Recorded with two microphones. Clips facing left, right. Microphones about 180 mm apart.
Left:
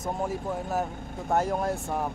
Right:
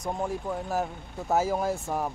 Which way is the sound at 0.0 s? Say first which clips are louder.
Even; centre (ahead or behind).